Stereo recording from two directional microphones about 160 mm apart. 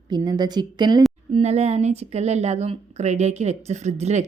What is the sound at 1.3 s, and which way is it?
A woman's voice, 40° right (ahead or behind).